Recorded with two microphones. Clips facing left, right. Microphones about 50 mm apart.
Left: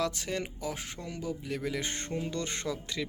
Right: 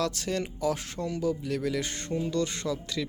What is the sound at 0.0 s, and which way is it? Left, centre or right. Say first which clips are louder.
Speech: right 3 dB; centre.